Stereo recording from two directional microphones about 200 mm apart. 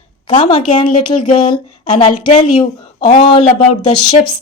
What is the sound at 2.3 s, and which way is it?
Speech, 35° left (ahead or behind).